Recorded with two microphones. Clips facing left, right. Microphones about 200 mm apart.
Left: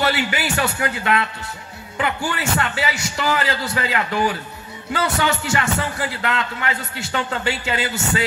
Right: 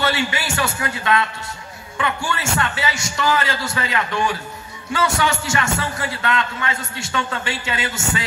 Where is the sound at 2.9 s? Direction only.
35° left (ahead or behind).